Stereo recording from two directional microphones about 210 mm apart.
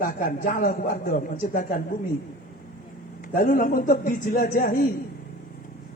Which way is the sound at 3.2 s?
40° left (ahead or behind).